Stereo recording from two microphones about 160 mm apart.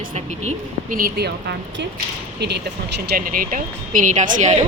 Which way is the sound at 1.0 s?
85° right.